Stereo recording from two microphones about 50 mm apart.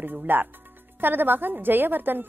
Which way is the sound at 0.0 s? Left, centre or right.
Right.